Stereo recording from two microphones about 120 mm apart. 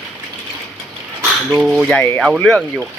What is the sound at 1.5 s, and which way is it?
Speech, 5° right (ahead or behind).